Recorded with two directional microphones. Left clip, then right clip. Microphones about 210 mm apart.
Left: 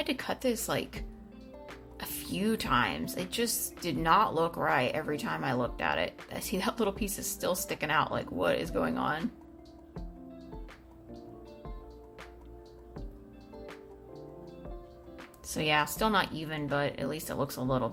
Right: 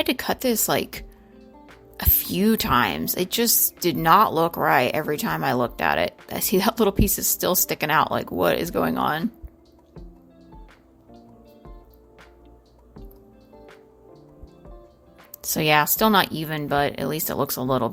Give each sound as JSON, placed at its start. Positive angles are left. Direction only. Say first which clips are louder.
{"t": 0.0, "sound": "speech", "louder": "right 8 dB", "side_deg": -45}
{"t": 15.4, "sound": "speech", "louder": "right 9 dB", "side_deg": -45}